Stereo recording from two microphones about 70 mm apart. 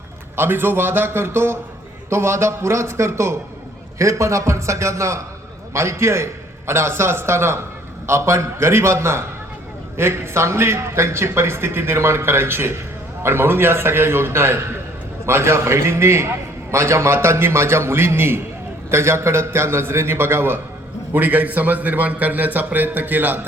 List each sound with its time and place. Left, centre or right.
0.3 s a man's voice: right